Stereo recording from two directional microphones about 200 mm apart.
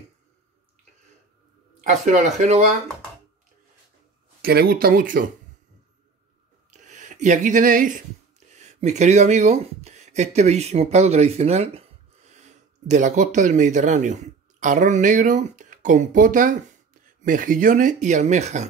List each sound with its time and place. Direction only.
1.8 s speech: 35° right (ahead or behind)
4.4 s speech: 50° right (ahead or behind)
6.7 s speech: 35° right (ahead or behind)